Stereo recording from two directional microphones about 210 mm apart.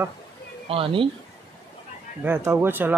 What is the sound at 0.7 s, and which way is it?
Speech, 25° right (ahead or behind).